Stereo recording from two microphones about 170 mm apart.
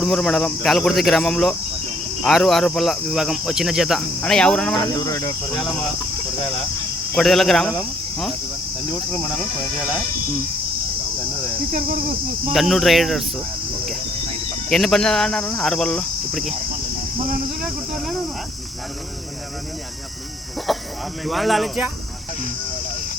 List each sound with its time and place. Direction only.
0.0 s speech: centre (ahead or behind)
4.8 s speech: 20° left (ahead or behind)
7.2 s speech: centre (ahead or behind)
12.5 s speech: centre (ahead or behind)
14.7 s speech: centre (ahead or behind)
17.9 s speech: centre (ahead or behind)
20.7 s cricket: centre (ahead or behind)
21.2 s speech: centre (ahead or behind)